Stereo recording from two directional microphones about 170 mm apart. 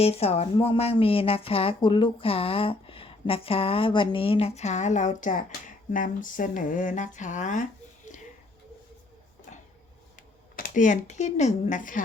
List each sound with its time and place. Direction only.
0.0 s a woman's voice: 35° left (ahead or behind)
10.2 s speech: 50° left (ahead or behind)